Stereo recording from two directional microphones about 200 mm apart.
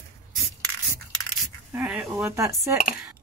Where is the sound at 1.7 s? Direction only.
Centre (ahead or behind).